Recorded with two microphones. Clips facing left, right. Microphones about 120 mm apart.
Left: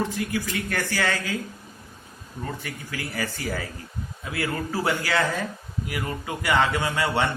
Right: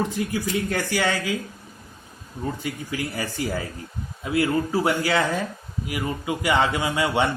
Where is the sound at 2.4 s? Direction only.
20° right (ahead or behind).